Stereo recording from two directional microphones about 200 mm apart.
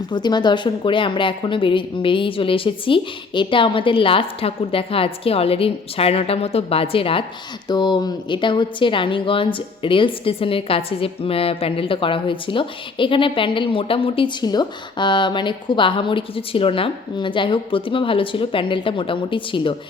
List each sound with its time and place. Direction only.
0.1 s a woman's voice: 20° left (ahead or behind)